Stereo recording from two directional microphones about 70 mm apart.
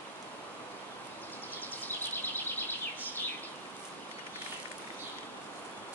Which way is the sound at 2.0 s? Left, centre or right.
Left.